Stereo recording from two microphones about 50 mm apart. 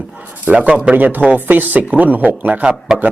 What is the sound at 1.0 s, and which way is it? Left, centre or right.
A man's voice, right.